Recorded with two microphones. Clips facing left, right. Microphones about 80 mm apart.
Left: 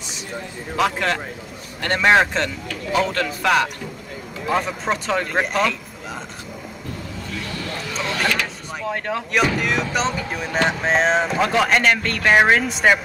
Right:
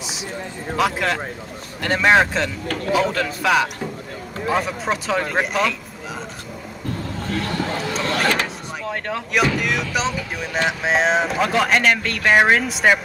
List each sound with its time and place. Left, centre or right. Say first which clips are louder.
0.7 s speech: even; centre
7.2 s a sound: right 8 dB; right
8.8 s speech: left 2 dB; centre